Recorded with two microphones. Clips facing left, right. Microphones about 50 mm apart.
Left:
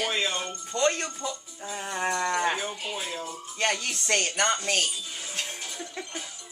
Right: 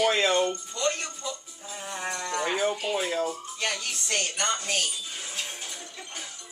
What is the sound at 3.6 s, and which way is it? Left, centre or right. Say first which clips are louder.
Music: left 6 dB; left.